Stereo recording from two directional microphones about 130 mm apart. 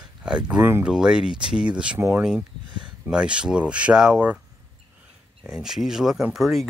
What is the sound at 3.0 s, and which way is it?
Speech, 5° right (ahead or behind).